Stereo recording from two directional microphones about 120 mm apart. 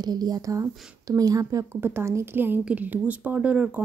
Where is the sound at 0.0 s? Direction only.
35° right (ahead or behind).